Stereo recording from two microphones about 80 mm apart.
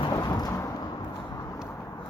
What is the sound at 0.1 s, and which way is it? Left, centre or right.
Thunder, left.